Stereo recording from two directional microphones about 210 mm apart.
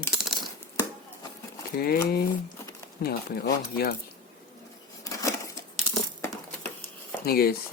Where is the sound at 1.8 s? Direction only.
45° left (ahead or behind).